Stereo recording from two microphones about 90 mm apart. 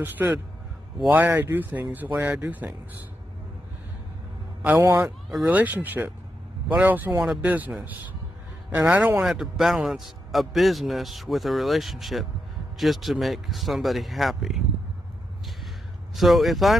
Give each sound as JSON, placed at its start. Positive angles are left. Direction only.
{"t": 0.2, "sound": "speech", "side_deg": -20}
{"t": 4.7, "sound": "speech", "side_deg": -25}
{"t": 8.7, "sound": "a man's voice", "side_deg": -15}
{"t": 16.2, "sound": "a man's voice", "side_deg": 0}